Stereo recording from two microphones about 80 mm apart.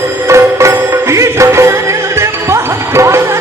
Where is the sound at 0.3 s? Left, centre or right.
Right.